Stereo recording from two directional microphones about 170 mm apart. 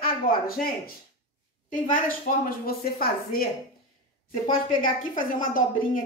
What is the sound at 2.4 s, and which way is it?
Speech, 60° left (ahead or behind).